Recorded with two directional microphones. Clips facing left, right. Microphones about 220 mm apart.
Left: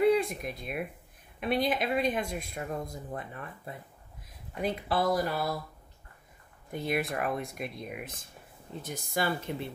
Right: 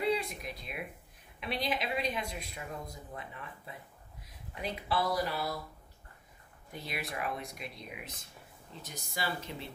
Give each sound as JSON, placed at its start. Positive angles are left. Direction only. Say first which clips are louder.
{"t": 0.1, "sound": "speech", "louder": "left 6 dB", "side_deg": 50}
{"t": 6.7, "sound": "speech", "louder": "left 9 dB", "side_deg": 50}